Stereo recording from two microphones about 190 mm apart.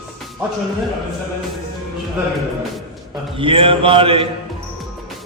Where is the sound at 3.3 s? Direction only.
30° right (ahead or behind).